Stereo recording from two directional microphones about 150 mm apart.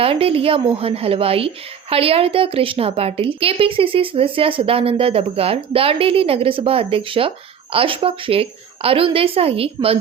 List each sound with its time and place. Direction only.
0.0 s a woman's voice: 40° right (ahead or behind)